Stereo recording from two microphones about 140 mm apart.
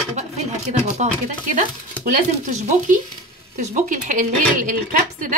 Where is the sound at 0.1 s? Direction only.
55° right (ahead or behind).